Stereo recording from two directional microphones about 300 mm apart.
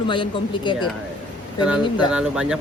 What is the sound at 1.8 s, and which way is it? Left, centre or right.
Speech, centre.